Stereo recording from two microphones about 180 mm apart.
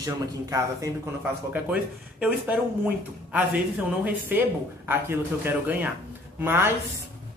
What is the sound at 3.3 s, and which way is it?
A man's voice, 10° right (ahead or behind).